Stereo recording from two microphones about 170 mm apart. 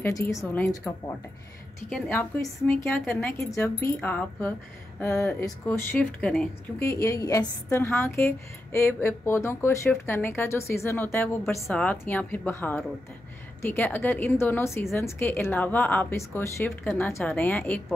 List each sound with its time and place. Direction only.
0.0 s a woman's voice: 15° left (ahead or behind)
2.0 s a woman's voice: 10° left (ahead or behind)
6.9 s a woman's voice: 15° left (ahead or behind)